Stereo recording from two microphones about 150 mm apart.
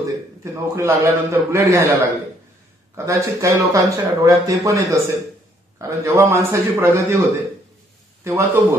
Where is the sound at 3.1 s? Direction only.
20° right (ahead or behind).